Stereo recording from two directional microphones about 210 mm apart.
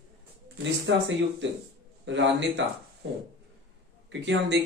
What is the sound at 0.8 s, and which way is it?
Speech, 60° right (ahead or behind).